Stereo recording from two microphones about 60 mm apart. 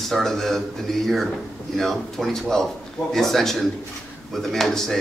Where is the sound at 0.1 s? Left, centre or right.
Centre.